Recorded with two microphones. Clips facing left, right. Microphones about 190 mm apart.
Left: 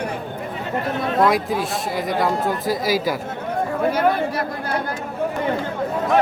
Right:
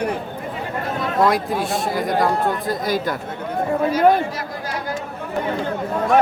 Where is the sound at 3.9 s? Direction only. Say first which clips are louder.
Right 3 dB; 55° left (ahead or behind).